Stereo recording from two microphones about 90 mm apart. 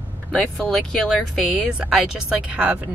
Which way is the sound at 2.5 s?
15° right (ahead or behind).